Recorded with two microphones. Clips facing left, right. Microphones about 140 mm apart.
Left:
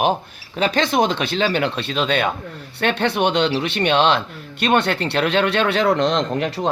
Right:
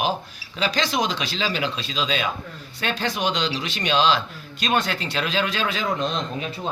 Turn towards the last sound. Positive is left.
turn(degrees=80)